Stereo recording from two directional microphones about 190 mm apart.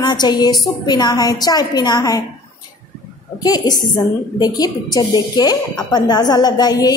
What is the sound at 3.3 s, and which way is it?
A woman's voice, 20° left (ahead or behind).